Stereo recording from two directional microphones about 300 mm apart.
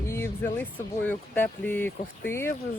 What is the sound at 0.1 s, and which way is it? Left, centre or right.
Speech, centre.